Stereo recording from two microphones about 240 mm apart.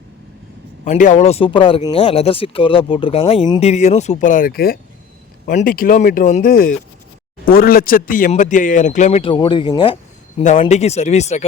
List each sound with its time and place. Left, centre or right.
0.9 s speech: left